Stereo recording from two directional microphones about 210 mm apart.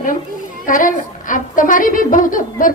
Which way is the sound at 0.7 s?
40° left (ahead or behind).